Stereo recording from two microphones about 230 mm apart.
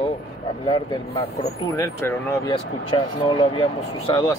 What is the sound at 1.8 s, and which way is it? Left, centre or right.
Speech, centre.